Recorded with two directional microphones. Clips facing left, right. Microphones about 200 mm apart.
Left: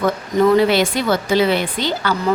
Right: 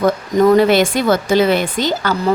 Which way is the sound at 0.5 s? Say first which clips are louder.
Right 3 dB; 50° right (ahead or behind).